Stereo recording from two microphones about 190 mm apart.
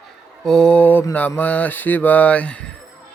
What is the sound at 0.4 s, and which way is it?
Mantra, 5° left (ahead or behind).